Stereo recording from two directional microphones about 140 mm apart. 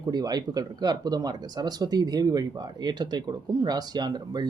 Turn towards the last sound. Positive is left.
turn(degrees=-30)  # may be behind; listen again after turning